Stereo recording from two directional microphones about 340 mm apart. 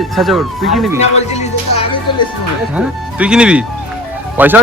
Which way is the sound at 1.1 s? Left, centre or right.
Centre.